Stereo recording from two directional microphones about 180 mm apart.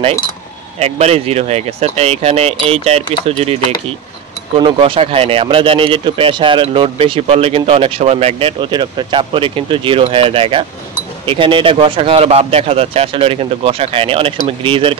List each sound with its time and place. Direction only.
0.7 s speech: 35° right (ahead or behind)
4.6 s speech: 25° right (ahead or behind)